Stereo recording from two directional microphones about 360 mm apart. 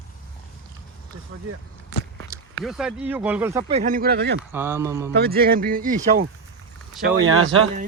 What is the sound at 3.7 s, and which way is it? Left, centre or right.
Speech, right.